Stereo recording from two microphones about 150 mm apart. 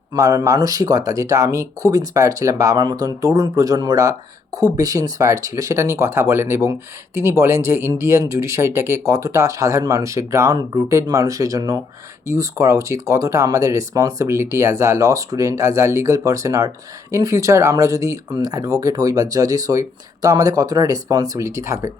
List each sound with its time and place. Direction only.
0.1 s speech: 20° right (ahead or behind)